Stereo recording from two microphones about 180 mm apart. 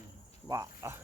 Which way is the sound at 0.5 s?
20° right (ahead or behind).